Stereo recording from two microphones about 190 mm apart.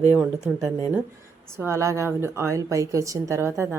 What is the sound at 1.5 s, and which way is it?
A woman's voice, 15° right (ahead or behind).